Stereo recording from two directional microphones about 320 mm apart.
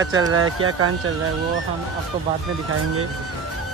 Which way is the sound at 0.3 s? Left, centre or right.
Right.